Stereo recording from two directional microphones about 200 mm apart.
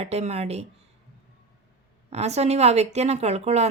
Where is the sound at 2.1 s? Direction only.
35° right (ahead or behind).